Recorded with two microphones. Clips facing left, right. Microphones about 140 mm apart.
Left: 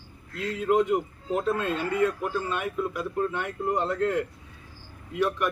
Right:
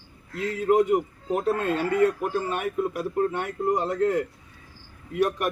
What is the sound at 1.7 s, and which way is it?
Speech, 50° right (ahead or behind).